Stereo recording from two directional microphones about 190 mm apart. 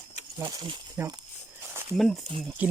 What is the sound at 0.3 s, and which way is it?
Speech, 20° right (ahead or behind).